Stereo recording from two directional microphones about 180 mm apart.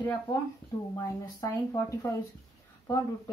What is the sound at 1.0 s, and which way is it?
Speech, 20° left (ahead or behind).